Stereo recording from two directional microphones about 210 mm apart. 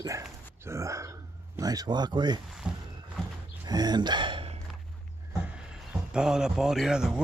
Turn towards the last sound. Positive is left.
turn(degrees=-5)  # may be behind; listen again after turning